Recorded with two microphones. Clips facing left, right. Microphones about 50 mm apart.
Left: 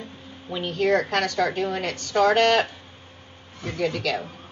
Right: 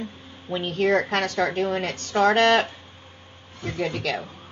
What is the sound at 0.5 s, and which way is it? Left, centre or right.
A woman's voice, right.